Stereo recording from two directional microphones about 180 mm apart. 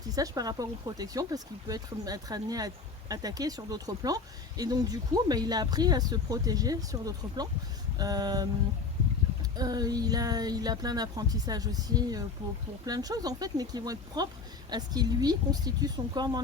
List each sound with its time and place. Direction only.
0.2 s speech: 20° right (ahead or behind)